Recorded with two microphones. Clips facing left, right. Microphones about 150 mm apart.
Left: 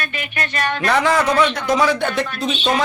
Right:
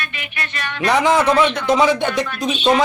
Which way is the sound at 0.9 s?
20° right (ahead or behind).